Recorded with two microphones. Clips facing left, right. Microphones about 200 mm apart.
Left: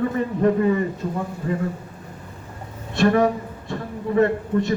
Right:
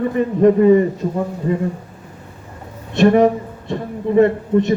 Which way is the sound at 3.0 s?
20° right (ahead or behind).